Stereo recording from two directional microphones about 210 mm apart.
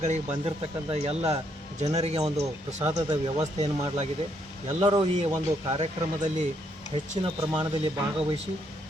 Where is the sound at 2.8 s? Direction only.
15° right (ahead or behind).